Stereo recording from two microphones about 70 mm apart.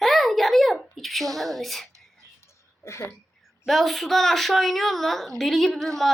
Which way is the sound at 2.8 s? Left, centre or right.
Left.